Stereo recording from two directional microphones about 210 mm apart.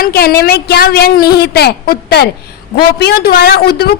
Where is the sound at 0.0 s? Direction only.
45° left (ahead or behind).